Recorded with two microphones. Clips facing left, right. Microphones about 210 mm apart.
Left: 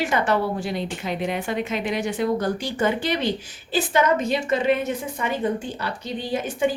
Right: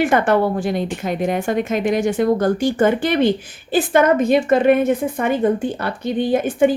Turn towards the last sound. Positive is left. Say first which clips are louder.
# right 9 dB
turn(degrees=-55)  # may be behind; listen again after turning